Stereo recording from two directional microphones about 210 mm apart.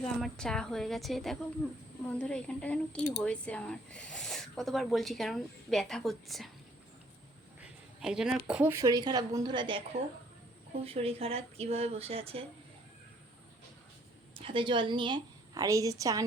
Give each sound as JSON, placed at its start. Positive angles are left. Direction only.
{"t": 0.0, "sound": "speech", "side_deg": 5}
{"t": 8.0, "sound": "speech", "side_deg": -5}
{"t": 10.8, "sound": "speech", "side_deg": -30}
{"t": 14.3, "sound": "a woman's voice", "side_deg": -25}